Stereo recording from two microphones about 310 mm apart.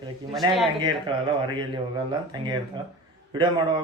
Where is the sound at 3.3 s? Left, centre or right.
Centre.